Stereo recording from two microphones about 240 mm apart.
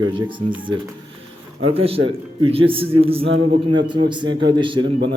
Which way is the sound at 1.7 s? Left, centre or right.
Right.